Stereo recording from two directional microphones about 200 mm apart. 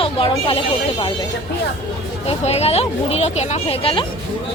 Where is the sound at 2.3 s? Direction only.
30° left (ahead or behind).